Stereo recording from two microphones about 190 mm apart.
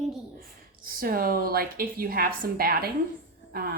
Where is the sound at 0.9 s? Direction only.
50° right (ahead or behind).